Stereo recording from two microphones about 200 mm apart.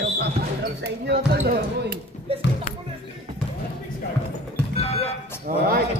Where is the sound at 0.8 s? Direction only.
55° right (ahead or behind).